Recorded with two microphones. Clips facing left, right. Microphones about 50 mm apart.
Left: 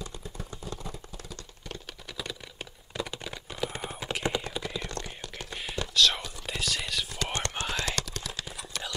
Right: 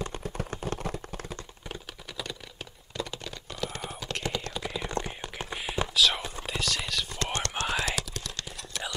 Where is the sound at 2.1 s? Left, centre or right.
Centre.